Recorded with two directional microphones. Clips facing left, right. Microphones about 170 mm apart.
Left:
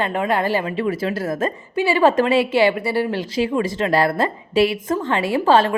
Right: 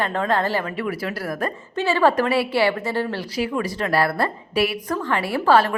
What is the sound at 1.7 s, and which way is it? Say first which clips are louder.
A woman's voice: left 2 dB; 15° left (ahead or behind).